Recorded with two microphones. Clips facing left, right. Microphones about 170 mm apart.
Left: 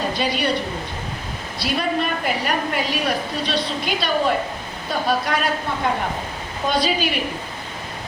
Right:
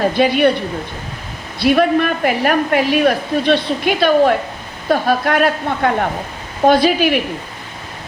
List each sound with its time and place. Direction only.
0.0 s a woman's voice: 60° right (ahead or behind)
1.5 s a woman's voice: 60° right (ahead or behind)